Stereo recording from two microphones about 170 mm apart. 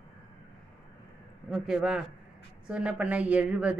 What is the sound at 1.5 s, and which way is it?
A woman's voice, 5° right (ahead or behind).